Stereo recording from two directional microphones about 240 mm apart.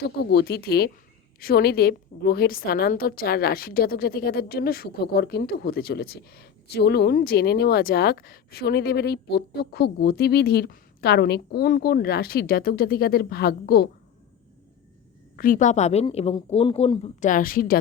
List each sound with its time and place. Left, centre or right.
0.0 s a woman's voice: left
15.4 s a woman's voice: left